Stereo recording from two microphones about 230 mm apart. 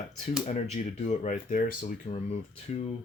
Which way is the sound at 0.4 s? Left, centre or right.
Left.